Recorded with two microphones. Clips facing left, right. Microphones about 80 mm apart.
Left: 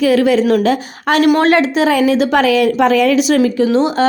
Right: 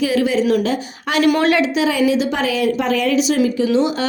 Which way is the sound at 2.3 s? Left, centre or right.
Left.